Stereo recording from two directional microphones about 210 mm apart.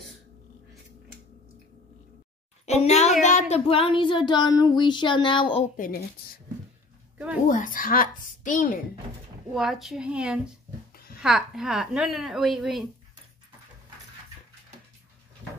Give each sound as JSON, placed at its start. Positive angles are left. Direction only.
{"t": 2.6, "sound": "a sound", "side_deg": 30}
{"t": 7.4, "sound": "a woman's voice", "side_deg": 40}
{"t": 9.5, "sound": "a woman's voice", "side_deg": 0}